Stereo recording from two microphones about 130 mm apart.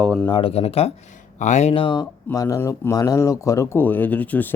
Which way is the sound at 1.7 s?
40° left (ahead or behind).